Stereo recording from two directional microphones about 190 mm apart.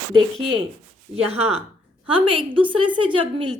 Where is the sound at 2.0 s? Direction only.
30° right (ahead or behind).